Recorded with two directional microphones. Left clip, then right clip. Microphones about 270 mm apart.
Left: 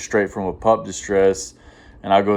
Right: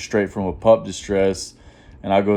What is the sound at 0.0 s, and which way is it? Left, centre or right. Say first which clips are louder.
Speech: left 1 dB; right.